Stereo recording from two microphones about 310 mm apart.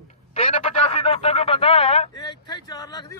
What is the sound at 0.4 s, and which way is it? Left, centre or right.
Telephone, centre.